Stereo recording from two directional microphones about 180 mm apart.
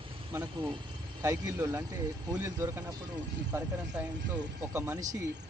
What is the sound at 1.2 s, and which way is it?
Speech, 15° right (ahead or behind).